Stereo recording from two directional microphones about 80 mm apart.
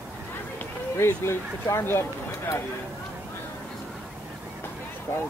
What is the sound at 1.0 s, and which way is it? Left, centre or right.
Speech, left.